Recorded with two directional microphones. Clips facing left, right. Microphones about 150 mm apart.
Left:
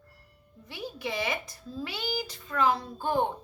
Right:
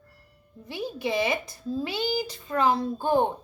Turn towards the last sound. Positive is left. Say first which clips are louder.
# right 5 dB
turn(degrees=-30)  # may be behind; listen again after turning